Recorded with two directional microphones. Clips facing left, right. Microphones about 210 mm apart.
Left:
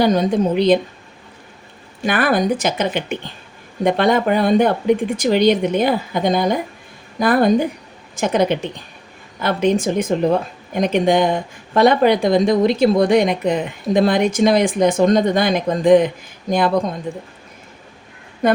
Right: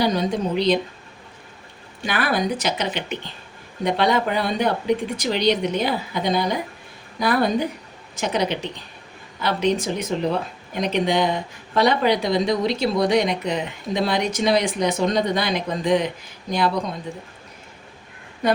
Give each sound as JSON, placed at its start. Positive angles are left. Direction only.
{"t": 0.0, "sound": "speech", "side_deg": 50}
{"t": 2.0, "sound": "speech", "side_deg": 50}